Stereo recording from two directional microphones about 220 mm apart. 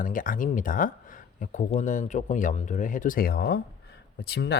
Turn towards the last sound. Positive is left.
turn(degrees=45)  # may be behind; listen again after turning